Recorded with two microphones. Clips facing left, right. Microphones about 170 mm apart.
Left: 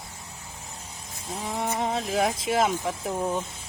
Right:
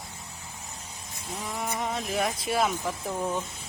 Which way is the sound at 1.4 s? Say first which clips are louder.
Left 4 dB; 30° left (ahead or behind).